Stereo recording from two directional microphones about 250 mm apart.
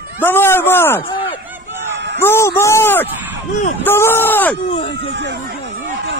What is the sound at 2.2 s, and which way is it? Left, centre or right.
Speech, centre.